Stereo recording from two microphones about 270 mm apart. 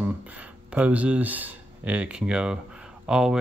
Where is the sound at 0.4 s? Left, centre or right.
Centre.